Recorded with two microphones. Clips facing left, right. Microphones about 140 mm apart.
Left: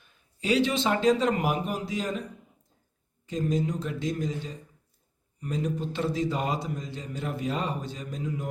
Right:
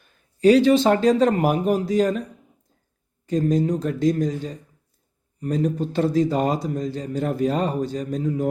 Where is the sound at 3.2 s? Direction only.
40° right (ahead or behind).